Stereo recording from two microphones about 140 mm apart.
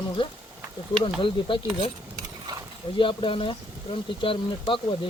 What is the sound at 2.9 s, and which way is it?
Speech, 35° left (ahead or behind).